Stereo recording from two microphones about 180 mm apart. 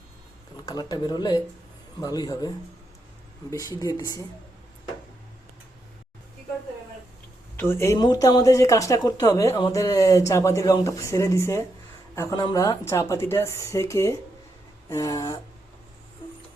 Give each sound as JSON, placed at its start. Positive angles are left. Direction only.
{"t": 0.6, "sound": "speech", "side_deg": 20}
{"t": 7.5, "sound": "speech", "side_deg": 10}